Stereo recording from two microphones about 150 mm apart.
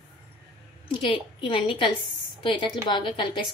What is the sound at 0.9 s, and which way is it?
A woman's voice, 35° left (ahead or behind).